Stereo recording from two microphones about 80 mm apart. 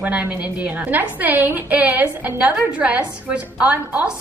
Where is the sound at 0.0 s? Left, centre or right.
Centre.